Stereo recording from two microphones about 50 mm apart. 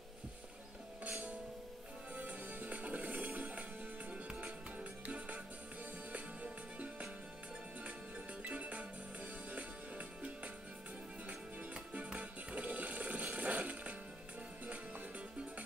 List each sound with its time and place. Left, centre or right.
2.1 s music: right
4.1 s music: right
4.5 s music: right
8.4 s music: right